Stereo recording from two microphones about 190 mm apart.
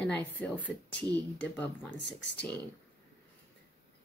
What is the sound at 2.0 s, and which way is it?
Speech, 65° left (ahead or behind).